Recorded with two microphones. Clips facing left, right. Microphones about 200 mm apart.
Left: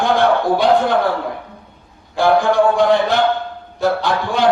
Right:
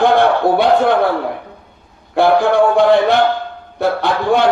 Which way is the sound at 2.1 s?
60° right (ahead or behind).